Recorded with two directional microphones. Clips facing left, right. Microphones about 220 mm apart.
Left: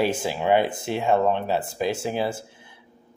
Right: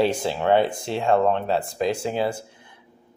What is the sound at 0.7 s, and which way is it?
Speech, 20° left (ahead or behind).